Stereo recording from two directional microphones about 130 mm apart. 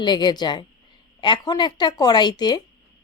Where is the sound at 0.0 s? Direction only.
35° left (ahead or behind).